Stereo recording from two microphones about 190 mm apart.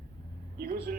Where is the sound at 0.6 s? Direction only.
50° right (ahead or behind).